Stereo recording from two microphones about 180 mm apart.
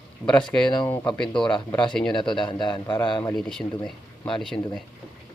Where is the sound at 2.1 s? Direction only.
25° left (ahead or behind).